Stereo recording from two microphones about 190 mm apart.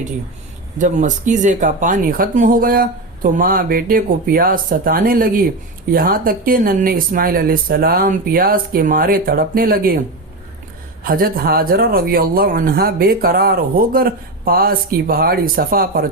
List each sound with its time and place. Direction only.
0.8 s speech: 40° right (ahead or behind)
11.0 s speech: 50° right (ahead or behind)